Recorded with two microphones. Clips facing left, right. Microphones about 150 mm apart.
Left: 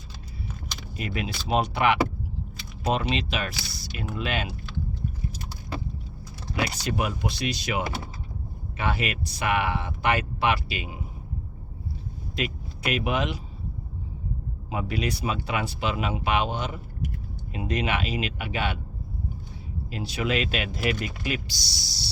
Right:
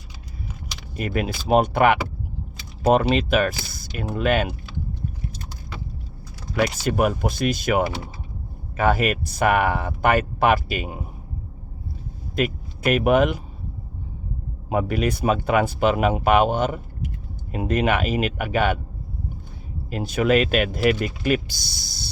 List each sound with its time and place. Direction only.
0.9 s speech: 50° right (ahead or behind)
6.6 s speech: 50° right (ahead or behind)
12.4 s speech: 50° right (ahead or behind)
14.7 s speech: 50° right (ahead or behind)
19.9 s speech: 50° right (ahead or behind)